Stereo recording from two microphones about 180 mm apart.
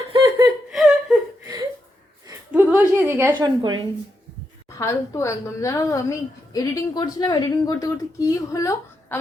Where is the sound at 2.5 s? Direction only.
10° right (ahead or behind); by 3.9 s 25° right (ahead or behind).